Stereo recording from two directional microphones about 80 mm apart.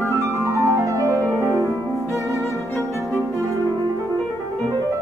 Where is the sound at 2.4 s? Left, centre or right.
Left.